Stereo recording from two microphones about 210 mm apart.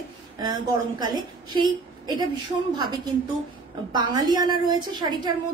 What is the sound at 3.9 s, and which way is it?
A woman's voice, 20° right (ahead or behind).